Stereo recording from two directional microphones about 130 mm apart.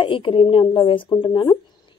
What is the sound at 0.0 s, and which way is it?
A woman's voice, 40° left (ahead or behind).